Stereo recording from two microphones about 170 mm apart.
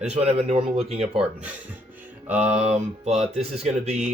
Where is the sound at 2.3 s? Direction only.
10° right (ahead or behind).